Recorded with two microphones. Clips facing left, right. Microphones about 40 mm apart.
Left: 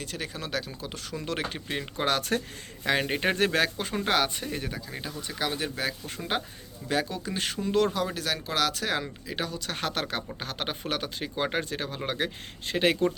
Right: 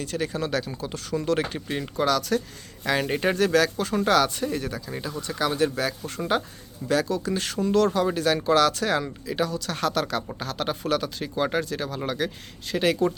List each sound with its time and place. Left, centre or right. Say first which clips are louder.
0.0 s speech: right 8 dB; centre
2.0 s a man's voice: right 4 dB; left
2.8 s speech: right 2 dB; centre
6.3 s speech: right 5 dB; left
8.0 s a man's voice: right 8 dB; centre; by 13.1 s left